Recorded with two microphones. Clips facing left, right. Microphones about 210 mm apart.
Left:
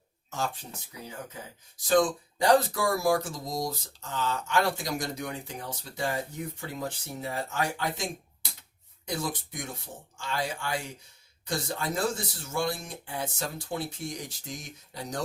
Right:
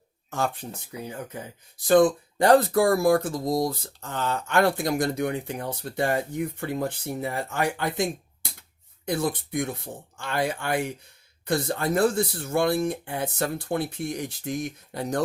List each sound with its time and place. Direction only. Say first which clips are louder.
0.3 s speech: right 5 dB; 55° right (ahead or behind)
1.8 s speech: right 6 dB; 60° right (ahead or behind)